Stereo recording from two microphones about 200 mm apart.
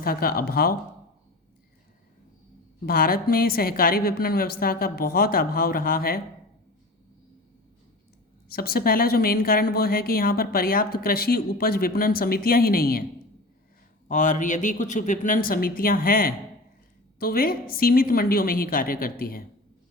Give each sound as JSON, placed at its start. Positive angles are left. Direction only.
{"t": 0.0, "sound": "speech", "side_deg": 50}
{"t": 2.8, "sound": "speech", "side_deg": 45}
{"t": 8.4, "sound": "speech", "side_deg": 50}
{"t": 14.1, "sound": "speech", "side_deg": 40}